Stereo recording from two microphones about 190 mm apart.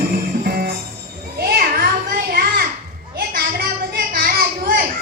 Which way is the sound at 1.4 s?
55° right (ahead or behind).